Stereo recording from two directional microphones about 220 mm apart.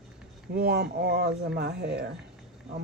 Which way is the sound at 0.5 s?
45° right (ahead or behind).